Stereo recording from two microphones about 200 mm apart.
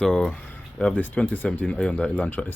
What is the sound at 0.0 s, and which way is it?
Speech, 5° left (ahead or behind).